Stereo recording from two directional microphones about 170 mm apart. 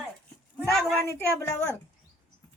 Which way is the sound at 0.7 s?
Centre (ahead or behind).